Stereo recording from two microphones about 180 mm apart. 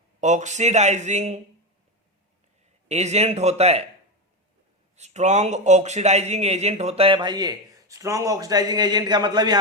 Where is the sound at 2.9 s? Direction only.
40° right (ahead or behind).